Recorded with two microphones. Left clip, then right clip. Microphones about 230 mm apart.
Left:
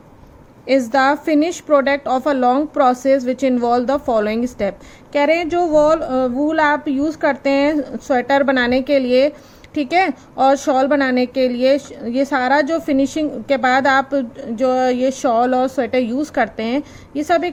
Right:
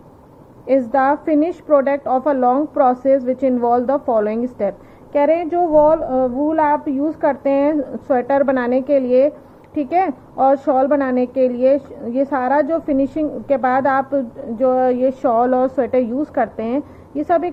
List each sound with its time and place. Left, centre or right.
0.7 s a woman's voice: left